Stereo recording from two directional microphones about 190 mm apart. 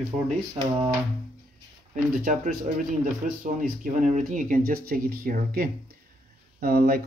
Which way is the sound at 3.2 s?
40° right (ahead or behind).